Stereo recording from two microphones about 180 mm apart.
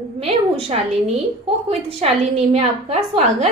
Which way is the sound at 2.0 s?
35° right (ahead or behind).